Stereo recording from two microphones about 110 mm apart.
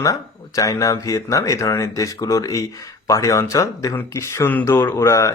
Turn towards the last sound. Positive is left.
turn(degrees=25)  # may be behind; listen again after turning